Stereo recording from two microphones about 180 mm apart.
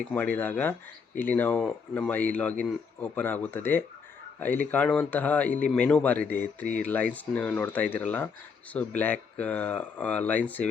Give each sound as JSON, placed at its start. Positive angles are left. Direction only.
{"t": 0.0, "sound": "speech", "side_deg": 5}